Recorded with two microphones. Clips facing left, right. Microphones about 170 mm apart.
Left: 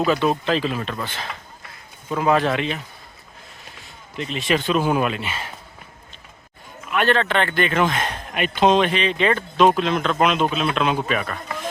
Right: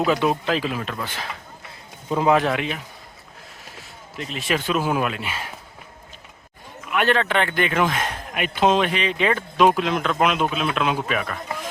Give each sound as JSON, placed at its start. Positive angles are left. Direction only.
{"t": 0.0, "sound": "speech", "side_deg": -15}
{"t": 4.2, "sound": "speech", "side_deg": -5}
{"t": 6.9, "sound": "speech", "side_deg": -10}